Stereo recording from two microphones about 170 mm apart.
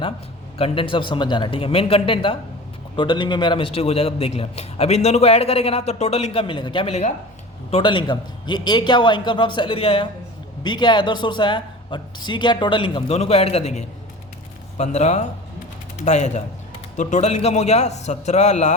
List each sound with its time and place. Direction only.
0.6 s a man's voice: 30° left (ahead or behind)